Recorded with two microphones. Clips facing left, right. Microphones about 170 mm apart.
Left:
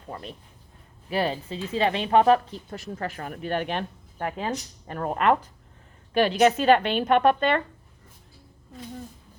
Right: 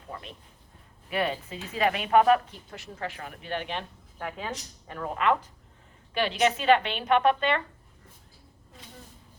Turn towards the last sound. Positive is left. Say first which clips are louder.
# left 3 dB
turn(degrees=45)  # may be behind; listen again after turning